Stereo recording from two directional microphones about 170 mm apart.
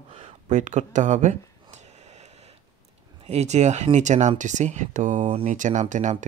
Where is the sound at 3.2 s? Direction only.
40° right (ahead or behind).